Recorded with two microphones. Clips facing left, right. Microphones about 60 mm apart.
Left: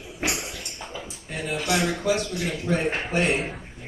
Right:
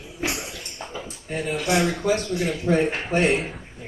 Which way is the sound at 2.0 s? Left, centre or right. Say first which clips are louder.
Right 2 dB; right.